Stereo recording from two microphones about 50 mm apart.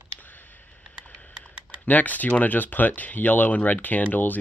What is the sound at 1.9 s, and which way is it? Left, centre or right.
Speech, left.